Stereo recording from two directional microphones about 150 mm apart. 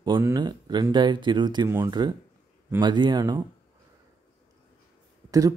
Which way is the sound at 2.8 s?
30° right (ahead or behind).